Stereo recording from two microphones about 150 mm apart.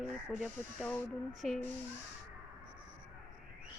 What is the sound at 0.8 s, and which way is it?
Speech, 10° left (ahead or behind).